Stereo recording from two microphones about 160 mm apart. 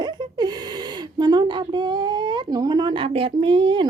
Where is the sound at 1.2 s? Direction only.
25° right (ahead or behind).